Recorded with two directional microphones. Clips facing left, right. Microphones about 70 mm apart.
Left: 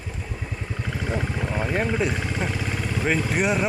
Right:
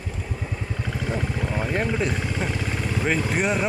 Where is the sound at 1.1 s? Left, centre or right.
Centre.